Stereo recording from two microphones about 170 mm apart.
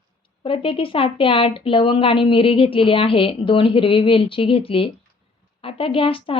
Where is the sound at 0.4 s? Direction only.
30° left (ahead or behind).